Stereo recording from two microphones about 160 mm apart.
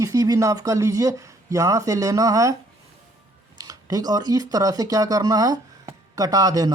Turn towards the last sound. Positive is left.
turn(degrees=-25)  # may be behind; listen again after turning